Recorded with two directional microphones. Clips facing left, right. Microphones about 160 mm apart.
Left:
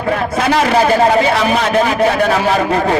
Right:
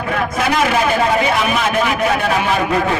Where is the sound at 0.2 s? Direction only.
30° left (ahead or behind).